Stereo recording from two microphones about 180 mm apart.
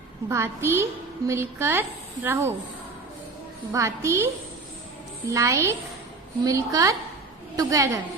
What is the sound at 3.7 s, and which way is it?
Speech, 15° right (ahead or behind).